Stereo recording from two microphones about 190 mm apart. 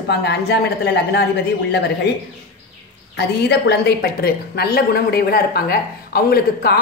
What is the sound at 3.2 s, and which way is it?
A woman's voice, 60° left (ahead or behind).